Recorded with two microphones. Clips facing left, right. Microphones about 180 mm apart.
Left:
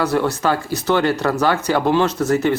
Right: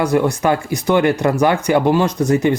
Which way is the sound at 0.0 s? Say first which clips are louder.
Right 3 dB; 15° right (ahead or behind).